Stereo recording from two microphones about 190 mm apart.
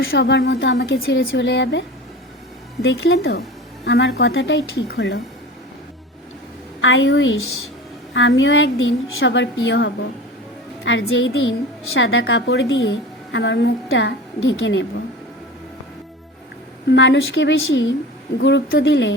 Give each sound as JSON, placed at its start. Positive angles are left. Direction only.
{"t": 0.0, "sound": "a woman's voice", "side_deg": 80}
{"t": 1.3, "sound": "a woman's voice", "side_deg": 70}
{"t": 2.8, "sound": "a woman's voice", "side_deg": 70}
{"t": 6.8, "sound": "a woman's voice", "side_deg": 80}
{"t": 16.9, "sound": "a woman's voice", "side_deg": 75}
{"t": 18.3, "sound": "a woman's voice", "side_deg": 70}